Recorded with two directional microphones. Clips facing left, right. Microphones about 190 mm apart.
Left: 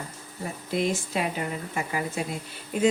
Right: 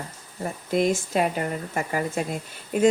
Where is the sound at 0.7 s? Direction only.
45° right (ahead or behind).